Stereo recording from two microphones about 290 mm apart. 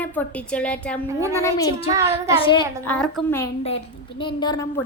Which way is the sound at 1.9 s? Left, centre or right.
Centre.